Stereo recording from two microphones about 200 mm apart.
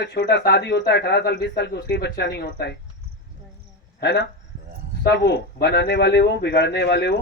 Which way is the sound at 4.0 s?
60° left (ahead or behind).